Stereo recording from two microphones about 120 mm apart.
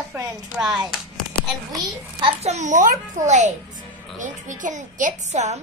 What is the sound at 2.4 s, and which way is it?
A child's voice, 70° right (ahead or behind).